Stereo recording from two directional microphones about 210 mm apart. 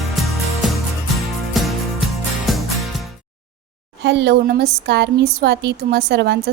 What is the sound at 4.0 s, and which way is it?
Speech, 55° right (ahead or behind).